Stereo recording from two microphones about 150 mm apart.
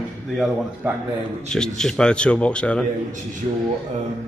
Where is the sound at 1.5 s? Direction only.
5° left (ahead or behind).